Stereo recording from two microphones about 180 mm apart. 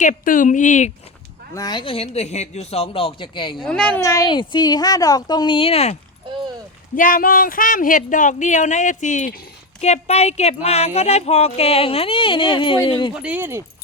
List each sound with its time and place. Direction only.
0.0 s speech: 45° left (ahead or behind)
1.5 s a sound: 25° left (ahead or behind)
3.6 s a child's voice: 5° left (ahead or behind)
4.0 s speech: 20° left (ahead or behind); by 6.0 s 35° left (ahead or behind)
6.9 s speech: 50° left (ahead or behind)
9.8 s a sound: 35° left (ahead or behind)
13.1 s speech: 10° right (ahead or behind)